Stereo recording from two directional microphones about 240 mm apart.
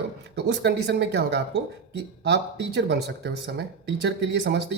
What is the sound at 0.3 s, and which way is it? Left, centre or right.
Speech, right.